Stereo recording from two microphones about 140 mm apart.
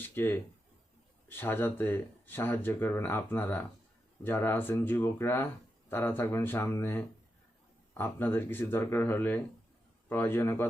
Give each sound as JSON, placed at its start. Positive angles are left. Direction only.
{"t": 0.0, "sound": "speech", "side_deg": 15}